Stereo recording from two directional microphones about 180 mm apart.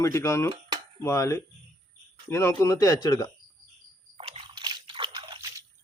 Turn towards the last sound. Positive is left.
turn(degrees=-25)  # may be behind; listen again after turning